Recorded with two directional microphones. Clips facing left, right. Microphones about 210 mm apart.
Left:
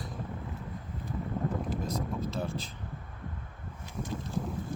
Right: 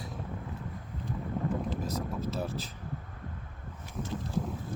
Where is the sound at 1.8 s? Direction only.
5° right (ahead or behind).